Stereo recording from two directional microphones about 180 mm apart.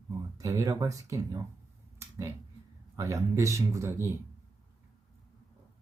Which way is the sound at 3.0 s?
15° right (ahead or behind).